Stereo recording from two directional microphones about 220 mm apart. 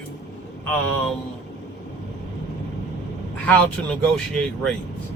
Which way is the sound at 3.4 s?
5° left (ahead or behind).